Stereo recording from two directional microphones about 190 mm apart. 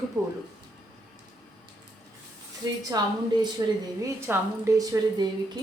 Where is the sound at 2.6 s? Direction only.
20° right (ahead or behind).